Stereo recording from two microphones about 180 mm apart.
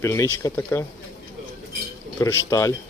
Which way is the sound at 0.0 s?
15° left (ahead or behind).